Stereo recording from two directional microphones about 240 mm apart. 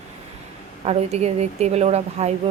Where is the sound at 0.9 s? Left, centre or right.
Right.